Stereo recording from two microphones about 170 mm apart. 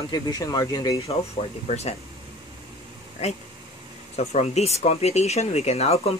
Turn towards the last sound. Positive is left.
turn(degrees=40)  # may be behind; listen again after turning